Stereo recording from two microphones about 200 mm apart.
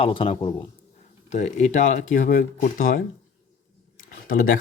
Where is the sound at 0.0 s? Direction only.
25° left (ahead or behind); by 3.0 s 45° left (ahead or behind).